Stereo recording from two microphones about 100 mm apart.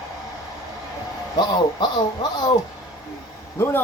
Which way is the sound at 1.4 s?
45° left (ahead or behind).